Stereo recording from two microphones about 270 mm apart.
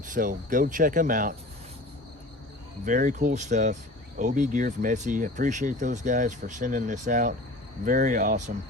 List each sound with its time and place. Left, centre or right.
0.0 s speech: right
2.8 s speech: right